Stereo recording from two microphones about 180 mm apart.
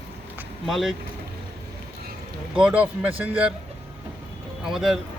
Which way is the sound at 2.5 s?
5° right (ahead or behind).